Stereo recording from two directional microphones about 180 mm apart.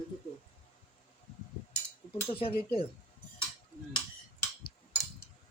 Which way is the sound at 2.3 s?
30° left (ahead or behind).